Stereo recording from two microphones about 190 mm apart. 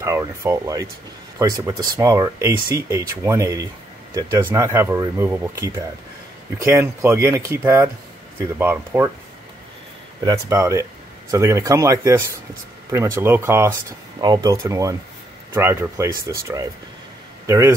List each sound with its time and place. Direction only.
0.0 s speech: 15° right (ahead or behind)
10.2 s speech: 20° right (ahead or behind)